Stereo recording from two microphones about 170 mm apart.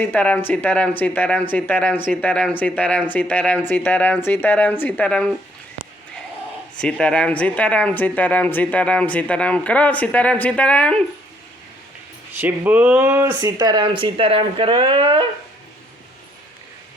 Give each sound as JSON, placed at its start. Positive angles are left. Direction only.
{"t": 0.0, "sound": "speech", "side_deg": 10}
{"t": 7.0, "sound": "speech", "side_deg": 5}
{"t": 12.4, "sound": "speech", "side_deg": -10}
{"t": 13.4, "sound": "speech", "side_deg": -25}